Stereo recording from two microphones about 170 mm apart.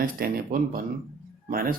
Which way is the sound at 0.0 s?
60° right (ahead or behind).